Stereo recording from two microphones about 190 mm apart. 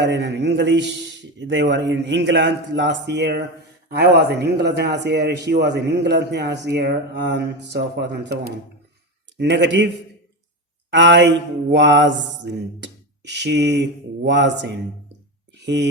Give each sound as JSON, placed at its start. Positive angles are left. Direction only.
{"t": 0.0, "sound": "a man's voice", "side_deg": -65}
{"t": 1.4, "sound": "mantra", "side_deg": -75}
{"t": 3.8, "sound": "a man's voice", "side_deg": -55}
{"t": 9.4, "sound": "mantra", "side_deg": -65}
{"t": 10.9, "sound": "mantra", "side_deg": -70}
{"t": 15.5, "sound": "a sound", "side_deg": -65}